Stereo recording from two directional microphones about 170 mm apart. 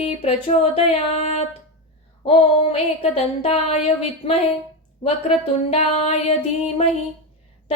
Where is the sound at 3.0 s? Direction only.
35° left (ahead or behind).